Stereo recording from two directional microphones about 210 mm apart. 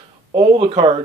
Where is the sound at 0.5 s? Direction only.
25° right (ahead or behind).